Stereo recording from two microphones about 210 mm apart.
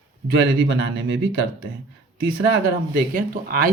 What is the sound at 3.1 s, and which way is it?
Speech, 40° right (ahead or behind).